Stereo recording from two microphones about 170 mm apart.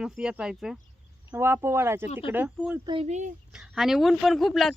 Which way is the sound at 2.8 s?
35° right (ahead or behind).